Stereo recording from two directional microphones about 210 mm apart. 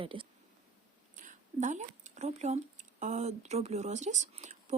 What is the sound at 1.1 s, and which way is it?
Speech, 35° right (ahead or behind).